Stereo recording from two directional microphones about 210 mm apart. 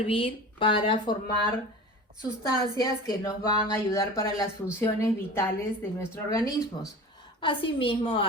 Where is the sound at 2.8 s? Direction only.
20° left (ahead or behind).